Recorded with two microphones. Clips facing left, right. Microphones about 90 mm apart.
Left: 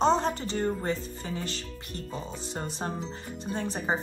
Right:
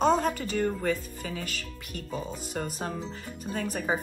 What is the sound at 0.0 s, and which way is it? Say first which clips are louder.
Speech: even; 30° left (ahead or behind).